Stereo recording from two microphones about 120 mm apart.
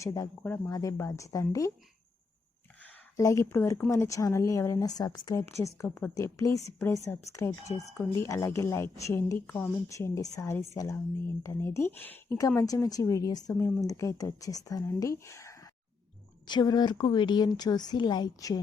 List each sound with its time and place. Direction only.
0.0 s a woman's voice: 25° left (ahead or behind)
3.2 s a woman's voice: 25° left (ahead or behind)